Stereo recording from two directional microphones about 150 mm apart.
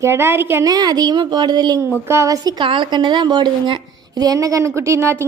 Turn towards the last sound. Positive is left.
turn(degrees=-15)  # may be behind; listen again after turning